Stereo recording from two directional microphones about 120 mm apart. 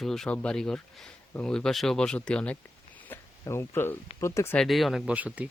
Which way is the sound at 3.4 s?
20° left (ahead or behind).